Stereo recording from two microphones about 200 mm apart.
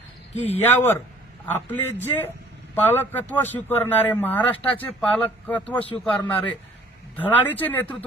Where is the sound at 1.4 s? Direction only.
10° left (ahead or behind).